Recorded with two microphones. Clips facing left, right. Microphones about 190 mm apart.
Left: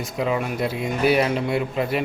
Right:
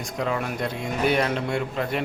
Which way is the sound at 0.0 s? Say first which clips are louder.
Left 3 dB; 5° left (ahead or behind).